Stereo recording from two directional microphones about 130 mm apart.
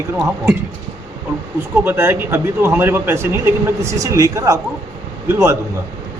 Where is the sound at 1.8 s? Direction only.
20° right (ahead or behind).